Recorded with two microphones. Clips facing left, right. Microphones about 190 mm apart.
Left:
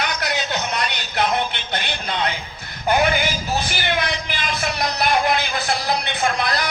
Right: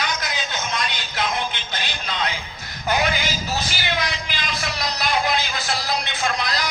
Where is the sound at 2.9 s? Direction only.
55° left (ahead or behind).